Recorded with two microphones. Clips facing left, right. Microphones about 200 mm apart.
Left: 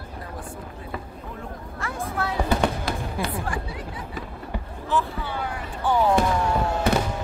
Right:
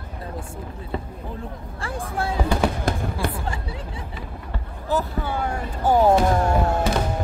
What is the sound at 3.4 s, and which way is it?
Music, 25° right (ahead or behind).